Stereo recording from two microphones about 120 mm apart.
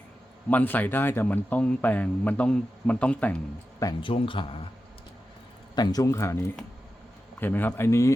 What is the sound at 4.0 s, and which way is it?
Speech, 50° left (ahead or behind).